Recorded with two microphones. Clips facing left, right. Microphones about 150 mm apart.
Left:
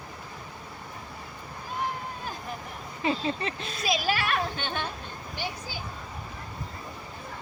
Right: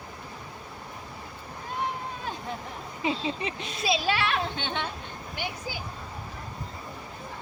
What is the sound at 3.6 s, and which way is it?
Speech, 20° right (ahead or behind).